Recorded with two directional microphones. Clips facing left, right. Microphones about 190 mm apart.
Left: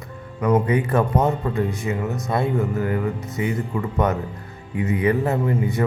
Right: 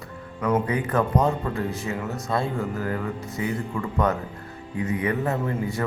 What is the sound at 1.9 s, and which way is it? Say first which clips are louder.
Speech: left 3 dB; 10° left (ahead or behind).